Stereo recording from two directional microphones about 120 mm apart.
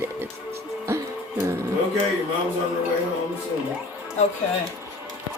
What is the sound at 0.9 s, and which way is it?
Music, 20° right (ahead or behind).